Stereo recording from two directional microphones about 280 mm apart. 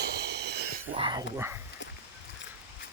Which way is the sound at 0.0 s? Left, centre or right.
Right.